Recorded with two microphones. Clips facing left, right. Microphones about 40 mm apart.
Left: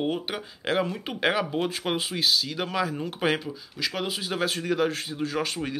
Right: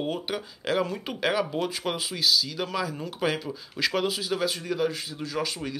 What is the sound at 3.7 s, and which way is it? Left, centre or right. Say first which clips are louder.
Speech: right 5 dB; centre.